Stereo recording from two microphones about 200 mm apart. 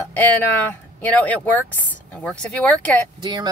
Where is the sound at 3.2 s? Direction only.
20° right (ahead or behind).